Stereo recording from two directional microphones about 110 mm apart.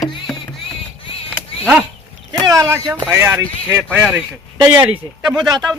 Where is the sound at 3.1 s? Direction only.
20° right (ahead or behind); by 5.5 s 5° right (ahead or behind).